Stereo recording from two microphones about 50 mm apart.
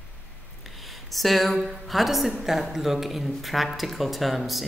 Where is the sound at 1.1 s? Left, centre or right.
Centre.